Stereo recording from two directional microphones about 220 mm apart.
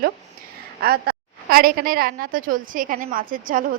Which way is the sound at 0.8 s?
45° right (ahead or behind).